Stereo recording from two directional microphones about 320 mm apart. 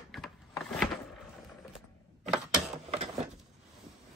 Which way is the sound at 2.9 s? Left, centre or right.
Centre.